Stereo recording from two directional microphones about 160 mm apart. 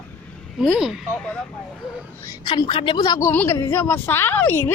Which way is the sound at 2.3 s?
25° left (ahead or behind).